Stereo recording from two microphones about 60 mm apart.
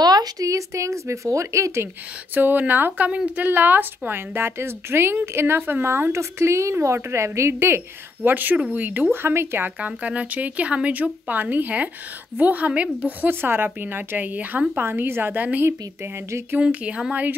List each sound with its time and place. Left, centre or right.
0.1 s speech: right
2.3 s a woman's voice: right
8.2 s speech: right
9.8 s speech: right
13.3 s speech: right
14.8 s speech: right